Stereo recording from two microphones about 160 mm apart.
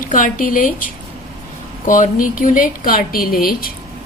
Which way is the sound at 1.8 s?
55° left (ahead or behind).